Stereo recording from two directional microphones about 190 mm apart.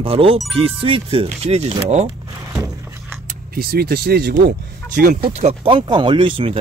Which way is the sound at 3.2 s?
50° right (ahead or behind).